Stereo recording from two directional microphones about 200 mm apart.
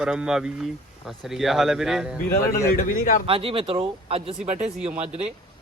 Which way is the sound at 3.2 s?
25° right (ahead or behind).